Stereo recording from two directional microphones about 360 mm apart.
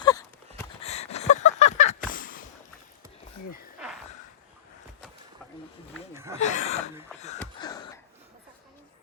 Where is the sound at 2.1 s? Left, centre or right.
Left.